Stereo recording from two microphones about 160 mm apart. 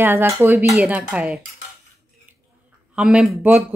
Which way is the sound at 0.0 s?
15° right (ahead or behind).